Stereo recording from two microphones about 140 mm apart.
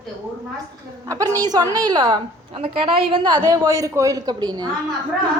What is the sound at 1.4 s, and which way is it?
Speech, 30° right (ahead or behind).